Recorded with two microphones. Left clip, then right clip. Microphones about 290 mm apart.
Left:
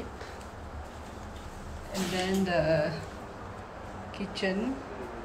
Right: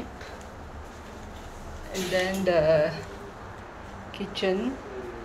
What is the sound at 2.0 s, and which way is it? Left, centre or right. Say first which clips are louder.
Speech: right 3 dB; centre.